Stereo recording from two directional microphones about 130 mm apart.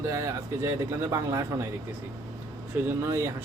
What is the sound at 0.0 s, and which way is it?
A man's voice, 20° right (ahead or behind).